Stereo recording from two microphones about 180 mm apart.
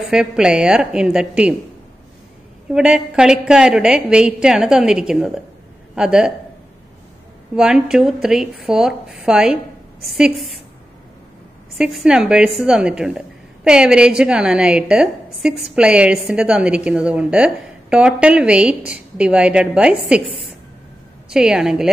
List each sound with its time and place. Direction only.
0.1 s a woman's voice: 5° right (ahead or behind)
2.7 s a woman's voice: 5° right (ahead or behind)
7.5 s a woman's voice: 5° right (ahead or behind)
11.8 s a woman's voice: 5° right (ahead or behind)